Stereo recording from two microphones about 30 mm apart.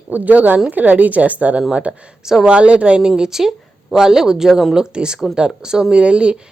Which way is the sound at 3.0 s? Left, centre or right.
Right.